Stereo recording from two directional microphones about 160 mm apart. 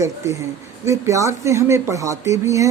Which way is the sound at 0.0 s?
20° right (ahead or behind).